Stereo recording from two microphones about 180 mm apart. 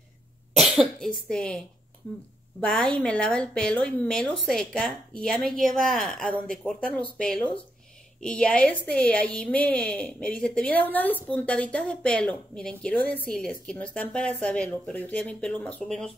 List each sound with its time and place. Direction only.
0.6 s speech: centre (ahead or behind)
2.6 s a woman's voice: 5° left (ahead or behind)